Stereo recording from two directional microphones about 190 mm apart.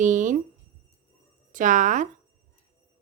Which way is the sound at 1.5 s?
40° right (ahead or behind).